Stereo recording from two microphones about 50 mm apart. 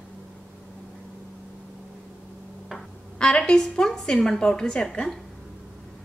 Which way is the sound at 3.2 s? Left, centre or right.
Centre.